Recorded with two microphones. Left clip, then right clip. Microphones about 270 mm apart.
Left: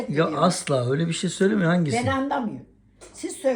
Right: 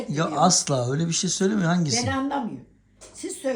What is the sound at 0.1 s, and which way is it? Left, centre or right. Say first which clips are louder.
A woman's voice: right 1 dB; centre.